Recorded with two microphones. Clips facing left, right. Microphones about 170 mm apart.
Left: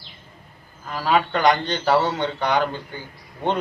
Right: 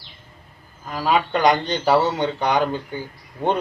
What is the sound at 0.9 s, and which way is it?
A man's voice, 15° right (ahead or behind).